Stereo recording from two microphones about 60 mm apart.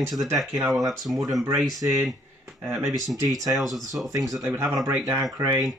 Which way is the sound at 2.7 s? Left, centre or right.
Right.